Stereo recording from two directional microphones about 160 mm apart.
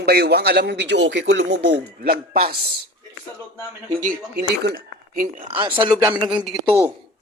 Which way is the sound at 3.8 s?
55° right (ahead or behind).